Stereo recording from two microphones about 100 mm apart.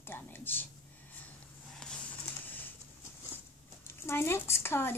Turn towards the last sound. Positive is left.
turn(degrees=25)  # may be behind; listen again after turning